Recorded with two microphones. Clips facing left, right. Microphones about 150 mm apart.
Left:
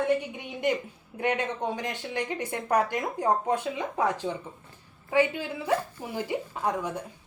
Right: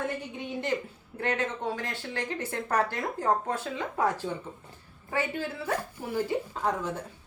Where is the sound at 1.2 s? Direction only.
15° left (ahead or behind).